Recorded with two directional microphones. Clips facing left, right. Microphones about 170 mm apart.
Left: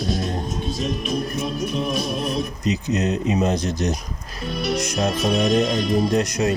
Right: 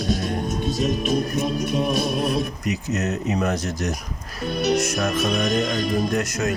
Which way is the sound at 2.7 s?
15° left (ahead or behind).